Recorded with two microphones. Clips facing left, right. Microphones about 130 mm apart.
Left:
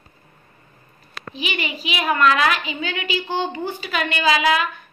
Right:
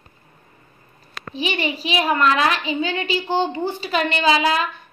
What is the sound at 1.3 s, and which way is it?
A woman's voice, 35° right (ahead or behind).